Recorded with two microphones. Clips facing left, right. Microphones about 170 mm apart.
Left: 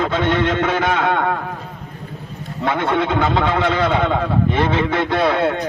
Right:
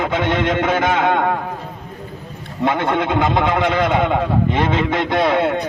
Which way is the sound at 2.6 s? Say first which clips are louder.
Right 1 dB; 15° right (ahead or behind).